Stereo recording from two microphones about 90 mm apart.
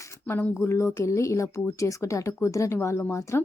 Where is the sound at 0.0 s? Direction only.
35° left (ahead or behind).